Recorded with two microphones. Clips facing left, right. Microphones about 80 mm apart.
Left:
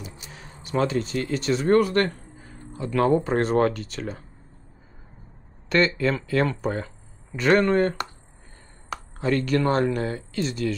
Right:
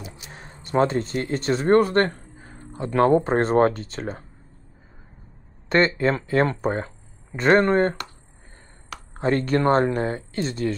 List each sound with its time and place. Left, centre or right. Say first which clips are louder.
0.3 s a sound: right 2 dB; right
0.7 s speech: right 3 dB; right
5.8 s speech: right 2 dB; right
9.2 s speech: right 2 dB; right